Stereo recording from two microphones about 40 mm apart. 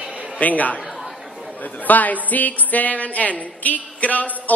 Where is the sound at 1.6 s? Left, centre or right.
Left.